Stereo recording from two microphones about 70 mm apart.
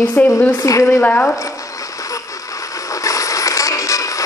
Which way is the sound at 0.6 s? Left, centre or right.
Left.